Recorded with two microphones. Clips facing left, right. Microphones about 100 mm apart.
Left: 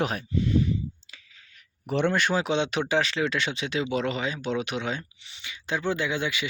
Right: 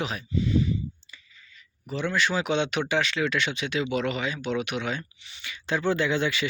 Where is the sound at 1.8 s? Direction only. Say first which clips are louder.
Left 3 dB; 60° left (ahead or behind).